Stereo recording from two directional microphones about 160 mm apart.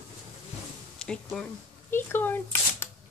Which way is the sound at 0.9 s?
5° left (ahead or behind).